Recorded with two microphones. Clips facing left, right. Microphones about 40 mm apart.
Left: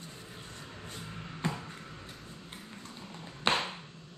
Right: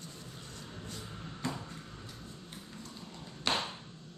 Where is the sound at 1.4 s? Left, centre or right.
Left.